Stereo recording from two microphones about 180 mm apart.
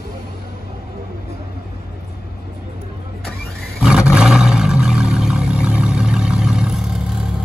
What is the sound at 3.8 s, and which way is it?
Roar, 5° right (ahead or behind).